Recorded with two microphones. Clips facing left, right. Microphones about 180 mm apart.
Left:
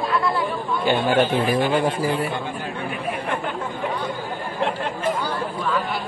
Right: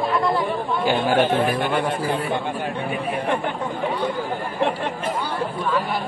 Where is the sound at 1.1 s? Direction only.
55° right (ahead or behind).